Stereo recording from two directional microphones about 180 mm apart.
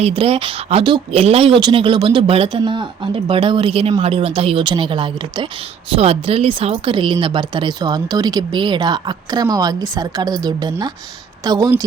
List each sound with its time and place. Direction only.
0.0 s speech: 30° right (ahead or behind)